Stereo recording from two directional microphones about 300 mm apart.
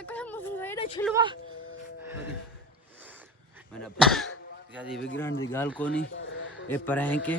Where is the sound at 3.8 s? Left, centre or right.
Centre.